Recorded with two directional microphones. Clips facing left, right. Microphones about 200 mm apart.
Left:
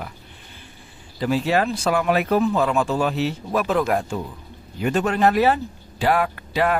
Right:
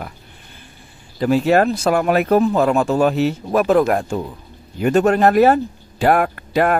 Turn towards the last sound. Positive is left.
turn(degrees=-50)  # may be behind; listen again after turning